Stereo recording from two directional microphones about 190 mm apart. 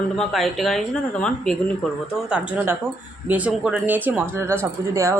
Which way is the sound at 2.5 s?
10° right (ahead or behind).